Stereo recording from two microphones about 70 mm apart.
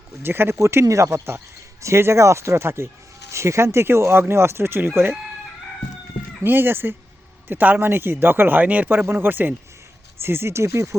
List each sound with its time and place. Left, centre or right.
0.2 s speech: right
6.4 s speech: right